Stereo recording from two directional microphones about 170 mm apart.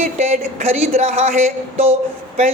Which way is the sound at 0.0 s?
40° right (ahead or behind).